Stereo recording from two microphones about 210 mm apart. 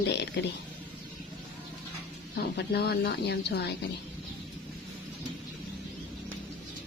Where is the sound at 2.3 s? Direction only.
50° left (ahead or behind).